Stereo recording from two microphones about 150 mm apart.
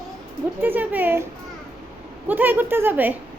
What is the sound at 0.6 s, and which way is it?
Speech, 10° right (ahead or behind).